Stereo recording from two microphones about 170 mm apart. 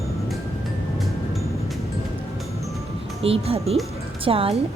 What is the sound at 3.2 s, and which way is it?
A woman's voice, 35° right (ahead or behind).